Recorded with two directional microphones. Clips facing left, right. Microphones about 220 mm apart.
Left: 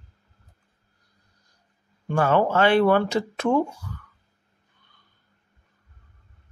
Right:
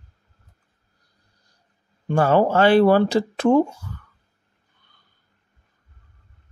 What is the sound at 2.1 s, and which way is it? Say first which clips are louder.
Speech: right 3 dB; 35° right (ahead or behind).